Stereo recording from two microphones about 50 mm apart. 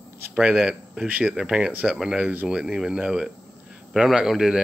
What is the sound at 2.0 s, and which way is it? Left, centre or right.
Speech, centre.